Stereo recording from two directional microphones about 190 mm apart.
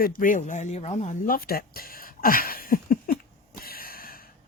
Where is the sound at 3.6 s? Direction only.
50° left (ahead or behind).